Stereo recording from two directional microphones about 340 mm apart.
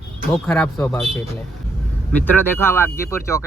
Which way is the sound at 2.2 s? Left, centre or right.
Centre.